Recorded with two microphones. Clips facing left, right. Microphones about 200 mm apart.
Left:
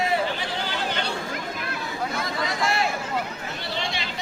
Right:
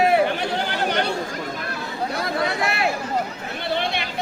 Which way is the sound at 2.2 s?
60° right (ahead or behind).